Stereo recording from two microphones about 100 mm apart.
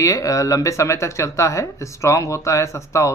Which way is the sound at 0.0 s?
30° left (ahead or behind).